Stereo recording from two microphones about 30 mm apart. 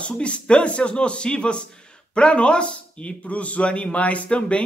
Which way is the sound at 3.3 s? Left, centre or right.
Left.